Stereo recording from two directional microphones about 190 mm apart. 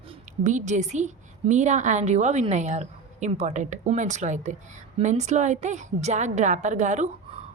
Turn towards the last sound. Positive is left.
turn(degrees=-40)  # may be behind; listen again after turning